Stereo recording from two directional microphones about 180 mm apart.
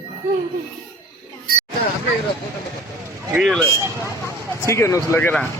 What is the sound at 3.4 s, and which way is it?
Speech, 5° left (ahead or behind).